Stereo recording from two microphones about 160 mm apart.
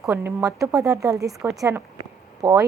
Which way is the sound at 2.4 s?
20° right (ahead or behind).